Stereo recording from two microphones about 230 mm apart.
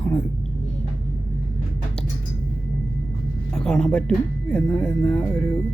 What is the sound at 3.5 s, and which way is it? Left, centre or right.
Speech, centre.